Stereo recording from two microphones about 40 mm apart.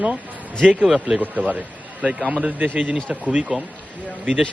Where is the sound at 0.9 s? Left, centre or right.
Centre.